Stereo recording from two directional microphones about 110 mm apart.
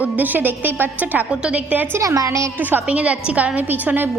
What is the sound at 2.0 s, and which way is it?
Speech, 30° right (ahead or behind).